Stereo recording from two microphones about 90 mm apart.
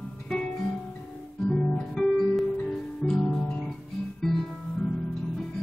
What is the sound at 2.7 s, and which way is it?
Music, 5° left (ahead or behind).